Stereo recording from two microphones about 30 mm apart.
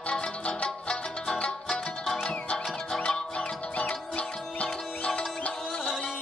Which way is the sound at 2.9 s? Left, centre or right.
Centre.